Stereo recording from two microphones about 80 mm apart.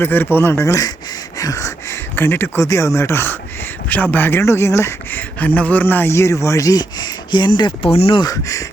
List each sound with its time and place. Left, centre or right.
0.0 s speech: left
1.4 s a sound: left
2.1 s speech: left
2.6 s speech: left
5.4 s a man's voice: centre; by 7.7 s left
8.3 s speech: left